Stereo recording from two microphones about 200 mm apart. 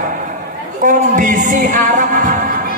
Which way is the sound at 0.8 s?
40° right (ahead or behind).